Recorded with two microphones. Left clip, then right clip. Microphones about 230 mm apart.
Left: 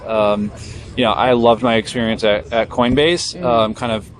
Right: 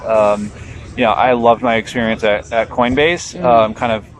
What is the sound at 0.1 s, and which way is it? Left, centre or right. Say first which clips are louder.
Speech: right 3 dB; left.